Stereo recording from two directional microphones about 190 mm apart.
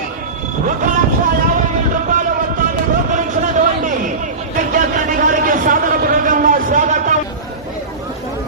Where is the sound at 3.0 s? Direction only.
40° right (ahead or behind).